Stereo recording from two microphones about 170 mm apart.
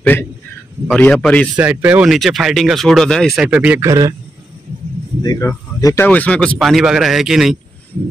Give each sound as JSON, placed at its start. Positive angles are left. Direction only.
{"t": 0.0, "sound": "a sound", "side_deg": 10}
{"t": 0.9, "sound": "a man's voice", "side_deg": 5}
{"t": 1.6, "sound": "speech", "side_deg": -10}
{"t": 3.8, "sound": "a man's voice", "side_deg": -20}
{"t": 5.2, "sound": "speech", "side_deg": 20}